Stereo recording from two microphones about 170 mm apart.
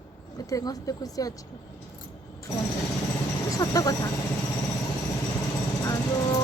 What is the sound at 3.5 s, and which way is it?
Speech, 20° left (ahead or behind).